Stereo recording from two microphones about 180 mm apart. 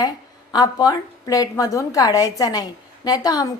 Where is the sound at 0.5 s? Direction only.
20° left (ahead or behind).